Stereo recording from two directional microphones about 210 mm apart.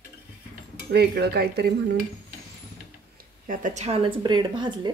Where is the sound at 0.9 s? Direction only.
50° right (ahead or behind).